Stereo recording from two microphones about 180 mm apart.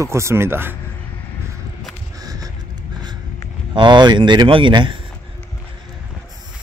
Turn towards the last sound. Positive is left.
turn(degrees=-25)  # may be behind; listen again after turning